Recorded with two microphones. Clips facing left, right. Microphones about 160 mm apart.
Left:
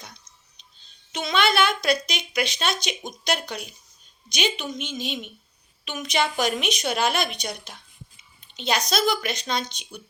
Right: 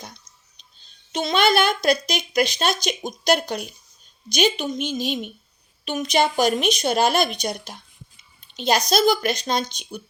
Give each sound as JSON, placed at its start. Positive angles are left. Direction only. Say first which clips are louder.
{"t": 1.1, "sound": "a woman's voice", "louder": "right 4 dB", "side_deg": -35}